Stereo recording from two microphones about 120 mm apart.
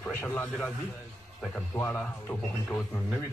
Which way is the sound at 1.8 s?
20° left (ahead or behind).